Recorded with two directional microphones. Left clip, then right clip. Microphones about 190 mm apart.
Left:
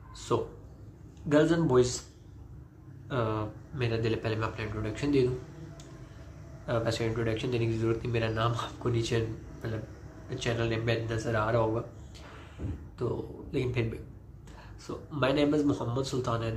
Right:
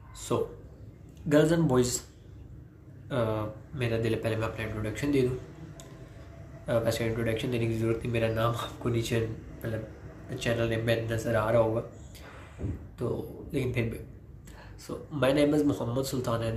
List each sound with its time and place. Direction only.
0.3 s speech: 10° right (ahead or behind)
3.1 s speech: 10° right (ahead or behind)
6.6 s speech: 10° right (ahead or behind)
13.0 s speech: 10° right (ahead or behind)
14.9 s speech: 15° right (ahead or behind)